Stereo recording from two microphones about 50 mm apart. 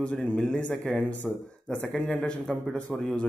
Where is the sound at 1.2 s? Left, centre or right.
Centre.